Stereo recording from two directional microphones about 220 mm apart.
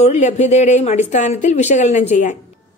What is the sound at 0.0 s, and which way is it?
Speech, 30° left (ahead or behind).